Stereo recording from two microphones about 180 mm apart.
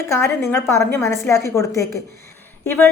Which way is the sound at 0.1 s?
15° left (ahead or behind).